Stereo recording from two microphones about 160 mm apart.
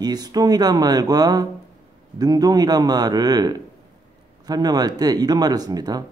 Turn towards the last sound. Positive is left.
turn(degrees=-25)  # may be behind; listen again after turning